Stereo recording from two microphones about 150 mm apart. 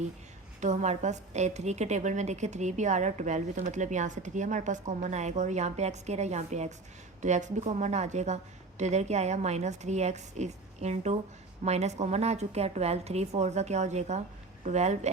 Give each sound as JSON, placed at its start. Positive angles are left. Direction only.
{"t": 0.6, "sound": "a woman's voice", "side_deg": -50}